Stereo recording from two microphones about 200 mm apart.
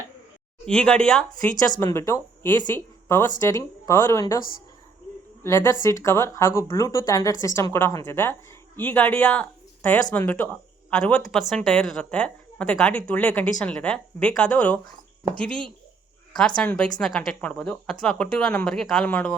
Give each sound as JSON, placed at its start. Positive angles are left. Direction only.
{"t": 0.6, "sound": "a woman's voice", "side_deg": 5}
{"t": 1.7, "sound": "speech", "side_deg": 15}
{"t": 5.4, "sound": "a woman's voice", "side_deg": 15}